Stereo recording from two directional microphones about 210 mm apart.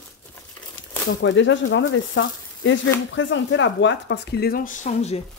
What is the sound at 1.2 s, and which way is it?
Speech, 60° left (ahead or behind).